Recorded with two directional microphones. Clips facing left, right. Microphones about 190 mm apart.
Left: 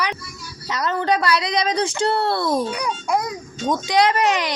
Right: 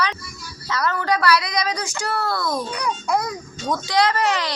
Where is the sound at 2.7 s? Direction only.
20° left (ahead or behind).